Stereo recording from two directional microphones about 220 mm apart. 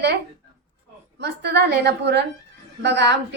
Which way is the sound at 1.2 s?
50° right (ahead or behind).